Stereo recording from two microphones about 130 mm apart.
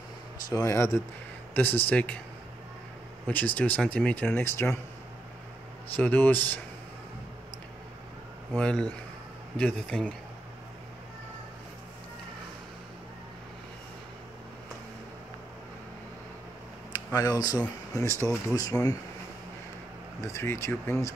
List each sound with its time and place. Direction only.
0.5 s speech: 25° left (ahead or behind)
3.3 s speech: 10° left (ahead or behind)
5.9 s speech: 15° left (ahead or behind)
8.5 s speech: 10° left (ahead or behind)
16.9 s speech: 30° left (ahead or behind)
20.2 s speech: 20° left (ahead or behind)